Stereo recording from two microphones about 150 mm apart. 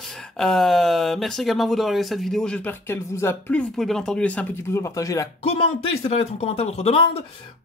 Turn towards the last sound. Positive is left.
turn(degrees=45)  # may be behind; listen again after turning